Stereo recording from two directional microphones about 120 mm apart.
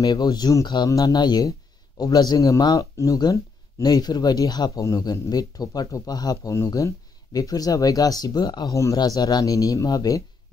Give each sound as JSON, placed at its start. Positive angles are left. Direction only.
{"t": 0.0, "sound": "speech", "side_deg": 35}